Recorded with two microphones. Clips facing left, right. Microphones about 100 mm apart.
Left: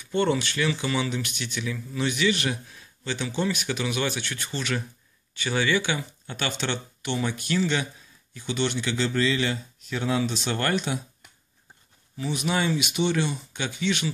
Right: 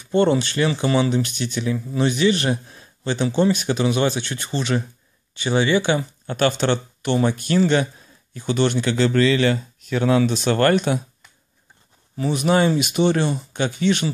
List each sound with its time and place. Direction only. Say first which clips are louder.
0.0 s speech: right 6 dB; 30° right (ahead or behind); by 11.0 s 55° right (ahead or behind)
12.2 s speech: right 8 dB; 45° right (ahead or behind)